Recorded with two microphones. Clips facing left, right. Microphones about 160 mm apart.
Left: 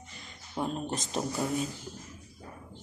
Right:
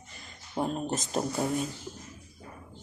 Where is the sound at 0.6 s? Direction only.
15° right (ahead or behind).